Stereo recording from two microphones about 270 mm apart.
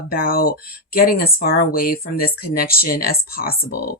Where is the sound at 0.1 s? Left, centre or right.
Left.